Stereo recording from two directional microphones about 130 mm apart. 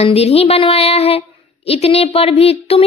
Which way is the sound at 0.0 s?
50° left (ahead or behind).